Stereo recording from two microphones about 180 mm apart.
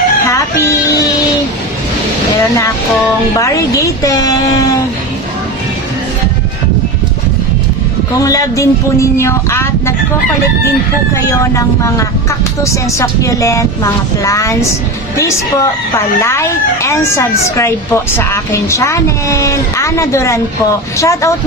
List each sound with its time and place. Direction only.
0.3 s music: 15° left (ahead or behind)
3.3 s speech: 15° left (ahead or behind)
8.2 s speech: 20° left (ahead or behind)
11.1 s speech: 15° left (ahead or behind)